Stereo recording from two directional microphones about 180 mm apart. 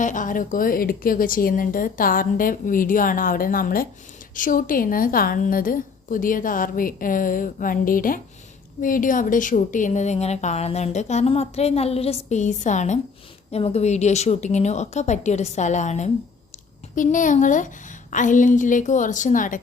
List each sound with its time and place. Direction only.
0.0 s a woman's voice: 45° left (ahead or behind)